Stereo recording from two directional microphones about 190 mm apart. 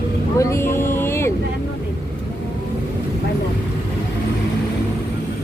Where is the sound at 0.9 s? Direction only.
15° left (ahead or behind).